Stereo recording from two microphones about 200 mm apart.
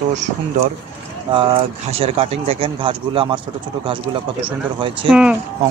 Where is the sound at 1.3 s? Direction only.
25° right (ahead or behind).